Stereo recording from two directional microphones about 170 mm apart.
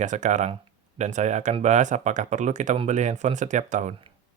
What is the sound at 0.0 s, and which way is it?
Speech, 45° right (ahead or behind).